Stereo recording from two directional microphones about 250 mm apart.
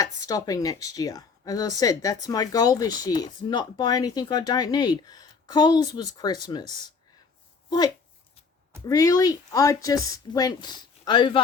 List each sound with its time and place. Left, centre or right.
0.0 s a woman's voice: centre
8.9 s a woman's voice: centre